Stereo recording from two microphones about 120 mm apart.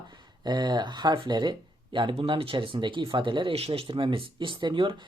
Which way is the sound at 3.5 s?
55° right (ahead or behind).